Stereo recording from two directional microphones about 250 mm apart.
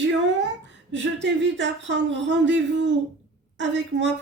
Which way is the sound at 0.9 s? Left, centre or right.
Right.